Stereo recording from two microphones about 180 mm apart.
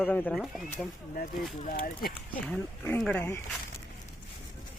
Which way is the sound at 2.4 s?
10° left (ahead or behind).